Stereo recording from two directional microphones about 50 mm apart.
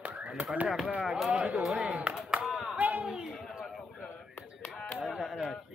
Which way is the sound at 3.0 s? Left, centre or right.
Centre.